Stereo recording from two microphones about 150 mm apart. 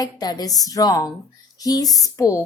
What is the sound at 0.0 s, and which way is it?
A woman's voice, 25° left (ahead or behind).